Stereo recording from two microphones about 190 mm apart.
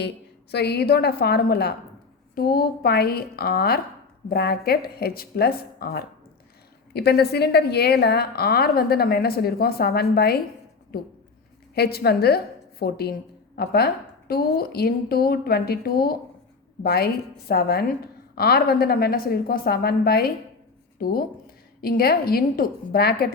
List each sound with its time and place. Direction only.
0.5 s a woman's voice: 60° left (ahead or behind)
11.7 s a woman's voice: 55° left (ahead or behind)